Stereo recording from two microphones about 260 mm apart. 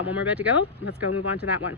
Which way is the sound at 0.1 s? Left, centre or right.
Centre.